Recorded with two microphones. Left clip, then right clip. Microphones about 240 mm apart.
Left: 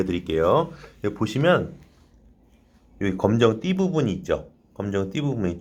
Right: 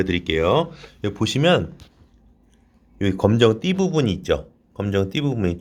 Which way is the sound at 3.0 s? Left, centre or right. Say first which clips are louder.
Right 3 dB; right.